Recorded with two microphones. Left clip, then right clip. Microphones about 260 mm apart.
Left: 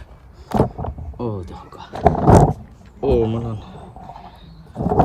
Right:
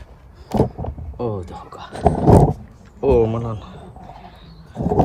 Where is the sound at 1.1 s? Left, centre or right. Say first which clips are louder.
Right 4 dB; centre.